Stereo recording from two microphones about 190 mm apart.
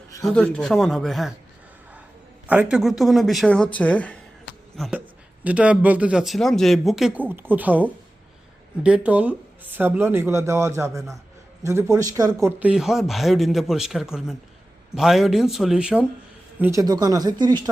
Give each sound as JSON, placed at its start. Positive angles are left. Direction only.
{"t": 0.3, "sound": "speech", "side_deg": 5}
{"t": 2.5, "sound": "speech", "side_deg": -5}
{"t": 4.8, "sound": "speech", "side_deg": -5}